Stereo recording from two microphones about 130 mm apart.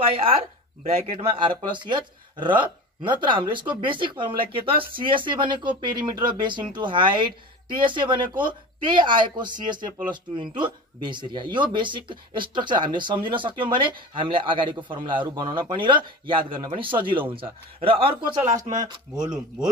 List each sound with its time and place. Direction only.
0.0 s speech: 45° right (ahead or behind)
1.7 s speech: 35° right (ahead or behind)
18.9 s speech: 35° right (ahead or behind)